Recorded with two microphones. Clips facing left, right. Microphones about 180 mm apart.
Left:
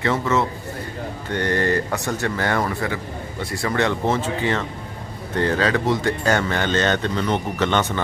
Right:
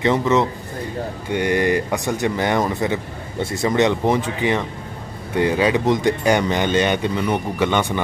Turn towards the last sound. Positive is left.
turn(degrees=-10)  # may be behind; listen again after turning